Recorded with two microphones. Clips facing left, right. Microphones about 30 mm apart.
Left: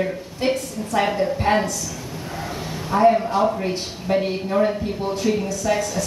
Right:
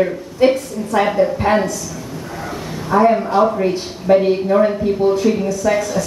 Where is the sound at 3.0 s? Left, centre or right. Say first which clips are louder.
Right 2 dB; centre.